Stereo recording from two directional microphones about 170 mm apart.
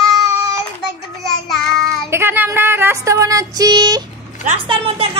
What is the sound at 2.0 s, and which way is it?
Female singing, 15° right (ahead or behind).